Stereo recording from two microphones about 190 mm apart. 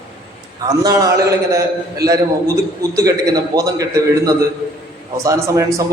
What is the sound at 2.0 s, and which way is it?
Speech, 55° right (ahead or behind).